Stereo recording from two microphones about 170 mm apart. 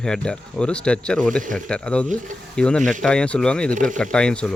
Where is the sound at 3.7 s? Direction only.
50° right (ahead or behind).